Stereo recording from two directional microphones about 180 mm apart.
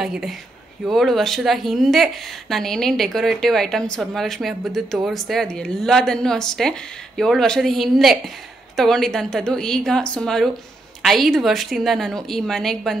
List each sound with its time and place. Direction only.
0.0 s a woman's voice: centre (ahead or behind)